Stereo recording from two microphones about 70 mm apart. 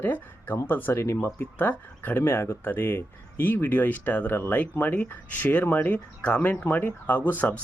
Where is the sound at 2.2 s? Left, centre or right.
Left.